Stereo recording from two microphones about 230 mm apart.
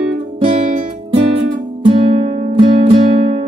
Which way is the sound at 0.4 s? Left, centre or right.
Right.